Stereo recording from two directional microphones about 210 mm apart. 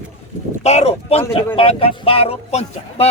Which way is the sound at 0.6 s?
30° left (ahead or behind).